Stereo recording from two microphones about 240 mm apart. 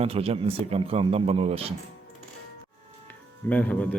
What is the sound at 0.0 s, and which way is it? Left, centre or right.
Speech, right.